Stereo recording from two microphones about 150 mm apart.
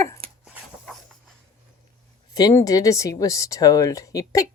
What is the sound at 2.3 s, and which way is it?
Speech, 25° left (ahead or behind).